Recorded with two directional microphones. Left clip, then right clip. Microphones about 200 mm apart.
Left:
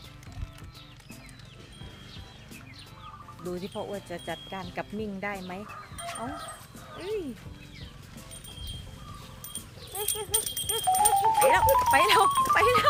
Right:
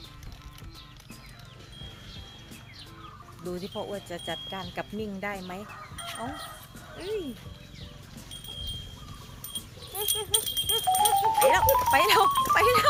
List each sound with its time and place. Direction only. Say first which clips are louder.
3.4 s speech: even; centre (ahead or behind)
6.1 s livestock: even; centre (ahead or behind)
6.9 s speech: even; centre (ahead or behind)
9.9 s speech: right 3 dB; 5° left (ahead or behind)